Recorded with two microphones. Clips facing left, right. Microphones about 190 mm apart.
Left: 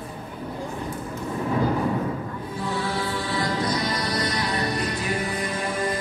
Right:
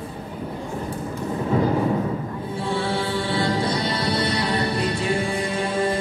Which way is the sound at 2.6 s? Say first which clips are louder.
Right 3 dB; 25° right (ahead or behind).